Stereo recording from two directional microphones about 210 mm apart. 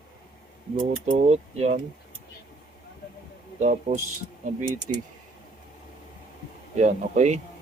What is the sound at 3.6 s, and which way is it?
Speech, 35° right (ahead or behind).